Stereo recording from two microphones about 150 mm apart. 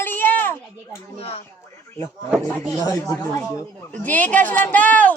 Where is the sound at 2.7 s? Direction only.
20° left (ahead or behind).